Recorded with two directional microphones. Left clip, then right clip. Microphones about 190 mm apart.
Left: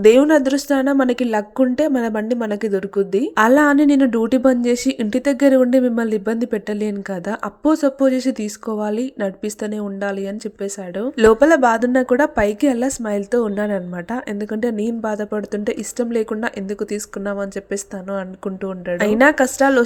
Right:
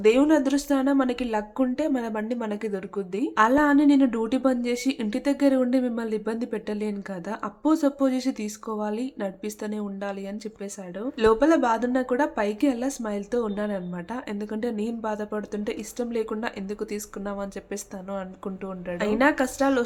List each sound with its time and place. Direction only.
0.0 s a woman's voice: 35° left (ahead or behind)
18.9 s a woman's voice: 35° left (ahead or behind)